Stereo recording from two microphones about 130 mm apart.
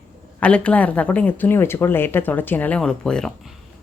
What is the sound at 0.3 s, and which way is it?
Speech, 10° left (ahead or behind).